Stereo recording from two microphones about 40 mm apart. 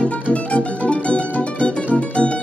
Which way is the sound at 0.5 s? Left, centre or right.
Left.